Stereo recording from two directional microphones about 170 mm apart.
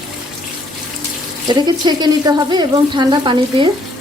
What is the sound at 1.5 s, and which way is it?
Speech, 25° right (ahead or behind).